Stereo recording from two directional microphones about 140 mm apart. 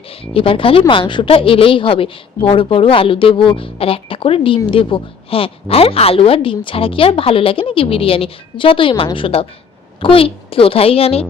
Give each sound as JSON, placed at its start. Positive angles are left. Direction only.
{"t": 0.1, "sound": "speech", "side_deg": 40}